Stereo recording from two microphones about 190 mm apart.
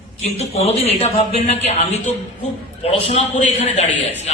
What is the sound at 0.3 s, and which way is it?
A man's voice, 35° left (ahead or behind).